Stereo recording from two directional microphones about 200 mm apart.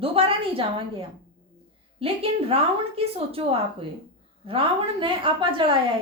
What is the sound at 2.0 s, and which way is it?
A woman's voice, 30° right (ahead or behind).